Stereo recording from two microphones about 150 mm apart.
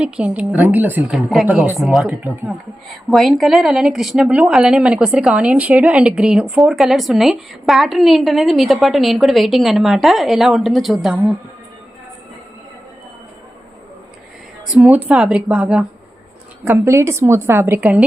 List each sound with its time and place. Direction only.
0.0 s a woman's voice: 10° right (ahead or behind)
3.1 s a woman's voice: centre (ahead or behind)
11.1 s a woman's voice: 10° right (ahead or behind)
14.7 s a woman's voice: 5° right (ahead or behind)